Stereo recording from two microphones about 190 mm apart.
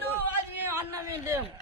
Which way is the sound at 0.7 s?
10° right (ahead or behind).